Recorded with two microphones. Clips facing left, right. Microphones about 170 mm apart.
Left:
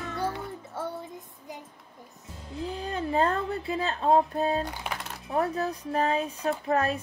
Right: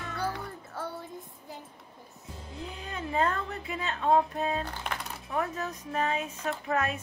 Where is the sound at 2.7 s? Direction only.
35° left (ahead or behind).